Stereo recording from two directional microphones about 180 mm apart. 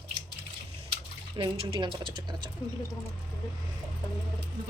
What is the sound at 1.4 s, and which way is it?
Speech, 30° right (ahead or behind).